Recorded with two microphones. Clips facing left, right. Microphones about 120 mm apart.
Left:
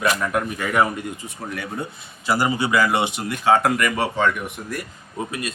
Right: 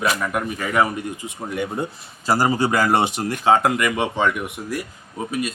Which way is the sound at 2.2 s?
40° right (ahead or behind).